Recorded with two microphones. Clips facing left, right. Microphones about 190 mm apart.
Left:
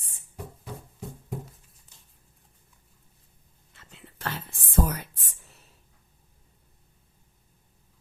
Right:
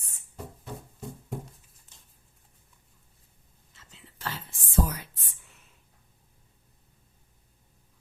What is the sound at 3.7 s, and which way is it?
Whispering, 55° left (ahead or behind).